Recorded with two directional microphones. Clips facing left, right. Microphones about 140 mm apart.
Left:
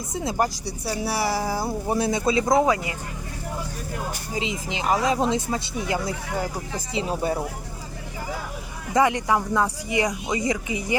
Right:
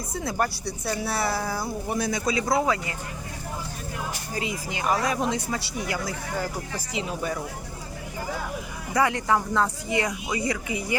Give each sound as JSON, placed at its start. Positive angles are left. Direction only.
{"t": 0.1, "sound": "speech", "side_deg": 20}
{"t": 0.6, "sound": "speech", "side_deg": 10}
{"t": 1.6, "sound": "speech", "side_deg": 30}
{"t": 4.4, "sound": "speech", "side_deg": 20}
{"t": 9.0, "sound": "speech", "side_deg": 20}